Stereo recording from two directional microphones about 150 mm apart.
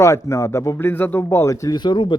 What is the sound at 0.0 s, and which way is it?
Speech, 20° left (ahead or behind).